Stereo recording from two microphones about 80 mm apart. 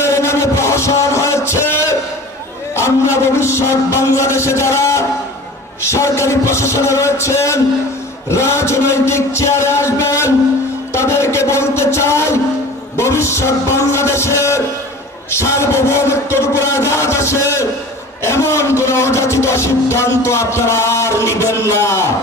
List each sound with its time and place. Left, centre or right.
0.0 s music: left
2.8 s a man's voice: left